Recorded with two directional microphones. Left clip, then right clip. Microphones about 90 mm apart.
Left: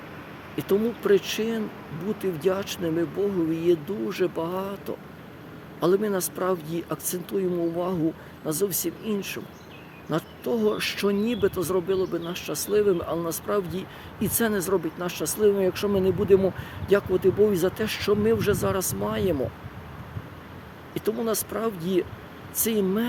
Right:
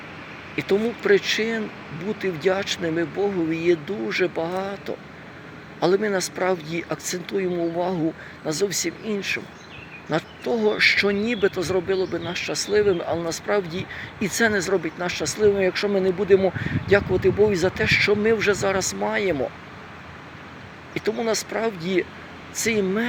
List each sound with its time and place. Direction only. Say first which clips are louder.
0.5 s speech: right 2 dB; 35° left (ahead or behind)
8.4 s speech: right 3 dB; 35° left (ahead or behind)
12.8 s speech: right 1 dB; 20° right (ahead or behind)
13.2 s speech: right 3 dB; 40° left (ahead or behind)
21.2 s speech: right 4 dB; 35° left (ahead or behind)